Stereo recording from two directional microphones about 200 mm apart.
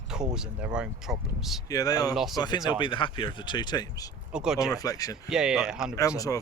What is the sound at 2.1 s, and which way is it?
Speech, centre (ahead or behind).